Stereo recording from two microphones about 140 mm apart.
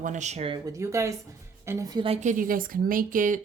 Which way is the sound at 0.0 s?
60° right (ahead or behind).